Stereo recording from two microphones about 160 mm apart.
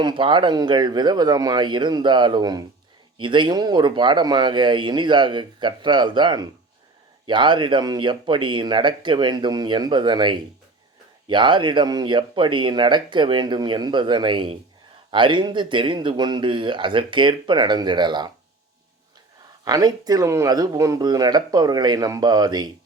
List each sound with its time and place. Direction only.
0.0 s speech: 30° right (ahead or behind)
19.6 s speech: 25° right (ahead or behind)